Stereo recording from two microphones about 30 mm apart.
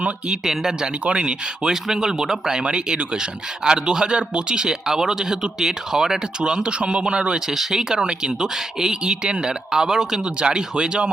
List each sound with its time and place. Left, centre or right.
1.0 s speech: right
1.7 s speech: centre
2.6 s speech: right
7.5 s speech: centre
7.9 s speech: right
10.4 s speech: right